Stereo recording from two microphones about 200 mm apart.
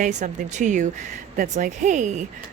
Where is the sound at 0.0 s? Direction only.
40° right (ahead or behind).